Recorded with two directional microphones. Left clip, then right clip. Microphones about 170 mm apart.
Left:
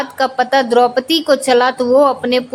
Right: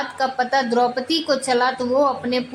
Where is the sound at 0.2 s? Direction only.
50° left (ahead or behind).